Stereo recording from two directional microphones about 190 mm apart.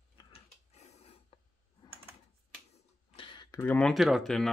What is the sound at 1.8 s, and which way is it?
Typing, 20° left (ahead or behind).